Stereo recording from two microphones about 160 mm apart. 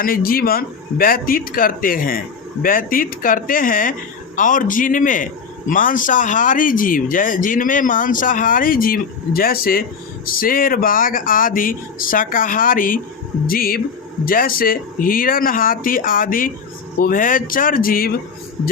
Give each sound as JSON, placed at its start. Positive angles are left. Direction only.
{"t": 0.0, "sound": "a man's voice", "side_deg": 65}